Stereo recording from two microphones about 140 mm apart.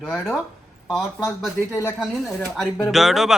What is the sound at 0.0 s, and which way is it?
Speech, 5° left (ahead or behind).